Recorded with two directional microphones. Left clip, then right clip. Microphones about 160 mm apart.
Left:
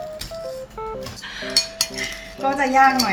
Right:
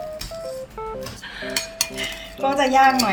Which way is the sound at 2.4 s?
50° right (ahead or behind).